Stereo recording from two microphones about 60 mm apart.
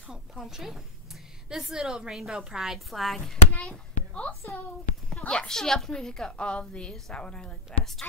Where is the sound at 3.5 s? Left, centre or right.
Left.